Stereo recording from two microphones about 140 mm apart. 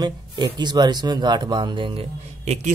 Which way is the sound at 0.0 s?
30° right (ahead or behind).